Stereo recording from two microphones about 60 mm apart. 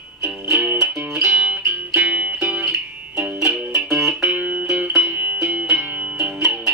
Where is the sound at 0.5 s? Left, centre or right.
Right.